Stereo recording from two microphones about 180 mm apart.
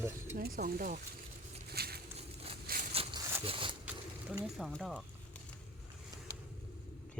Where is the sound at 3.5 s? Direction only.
30° right (ahead or behind).